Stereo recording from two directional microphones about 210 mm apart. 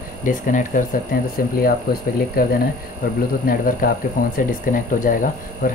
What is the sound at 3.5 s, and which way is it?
Speech, 45° left (ahead or behind).